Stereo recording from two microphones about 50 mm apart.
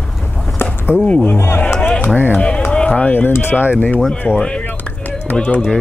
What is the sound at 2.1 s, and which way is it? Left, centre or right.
Speech, left.